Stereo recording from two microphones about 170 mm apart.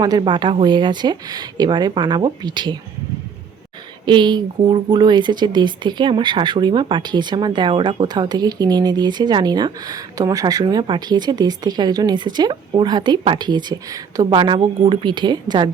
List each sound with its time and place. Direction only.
0.0 s speech: 25° right (ahead or behind)
4.0 s speech: 25° right (ahead or behind)